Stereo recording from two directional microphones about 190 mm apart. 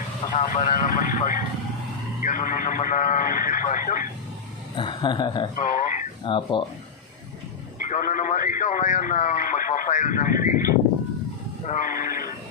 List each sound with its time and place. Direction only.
0.3 s speech: 40° left (ahead or behind)
4.8 s speech: 25° left (ahead or behind)
5.5 s speech: 40° left (ahead or behind)
6.2 s speech: 25° left (ahead or behind)
7.9 s speech: 45° left (ahead or behind)